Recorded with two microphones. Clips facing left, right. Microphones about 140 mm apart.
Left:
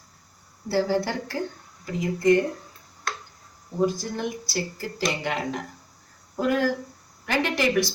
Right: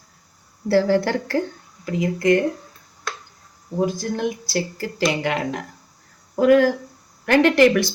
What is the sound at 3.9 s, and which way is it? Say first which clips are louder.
Speech: right 5 dB; 90° right.